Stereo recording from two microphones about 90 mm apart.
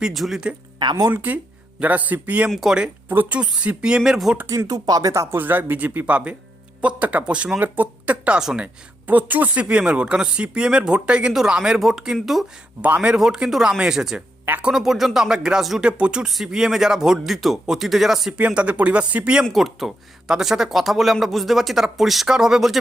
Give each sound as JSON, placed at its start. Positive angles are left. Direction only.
{"t": 0.0, "sound": "speech", "side_deg": 0}
{"t": 0.8, "sound": "speech", "side_deg": -50}
{"t": 1.1, "sound": "speech", "side_deg": -20}
{"t": 2.5, "sound": "speech", "side_deg": -5}
{"t": 3.1, "sound": "speech", "side_deg": -20}
{"t": 4.4, "sound": "speech", "side_deg": -45}
{"t": 5.4, "sound": "speech", "side_deg": -20}
{"t": 12.8, "sound": "speech", "side_deg": -15}
{"t": 18.3, "sound": "speech", "side_deg": -15}
{"t": 19.5, "sound": "speech", "side_deg": 0}